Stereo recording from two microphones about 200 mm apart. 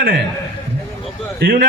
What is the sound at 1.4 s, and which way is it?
Speech, 50° right (ahead or behind).